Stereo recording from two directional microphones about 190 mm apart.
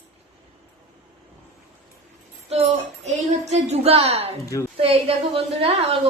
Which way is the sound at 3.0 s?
35° right (ahead or behind).